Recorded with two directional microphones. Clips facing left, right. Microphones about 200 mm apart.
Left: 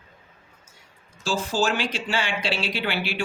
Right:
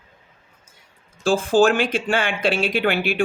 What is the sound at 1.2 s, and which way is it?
Speech, 55° right (ahead or behind).